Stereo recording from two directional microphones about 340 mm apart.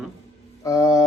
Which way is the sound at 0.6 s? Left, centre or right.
Centre.